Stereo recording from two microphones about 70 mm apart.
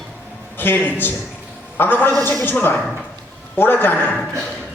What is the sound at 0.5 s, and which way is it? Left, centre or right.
A man's voice, left.